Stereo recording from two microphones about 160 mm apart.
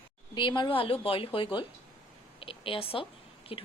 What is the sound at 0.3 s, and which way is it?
A woman's voice, 30° left (ahead or behind).